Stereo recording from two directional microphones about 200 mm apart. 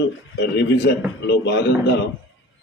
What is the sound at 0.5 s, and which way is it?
A man's voice, 60° left (ahead or behind).